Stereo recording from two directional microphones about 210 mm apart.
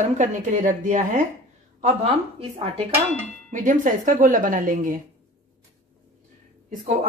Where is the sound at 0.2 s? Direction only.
35° right (ahead or behind).